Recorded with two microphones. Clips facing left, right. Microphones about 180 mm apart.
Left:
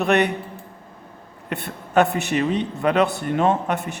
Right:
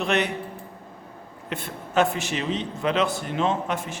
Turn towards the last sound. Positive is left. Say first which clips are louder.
# left 4 dB
turn(degrees=65)  # may be behind; listen again after turning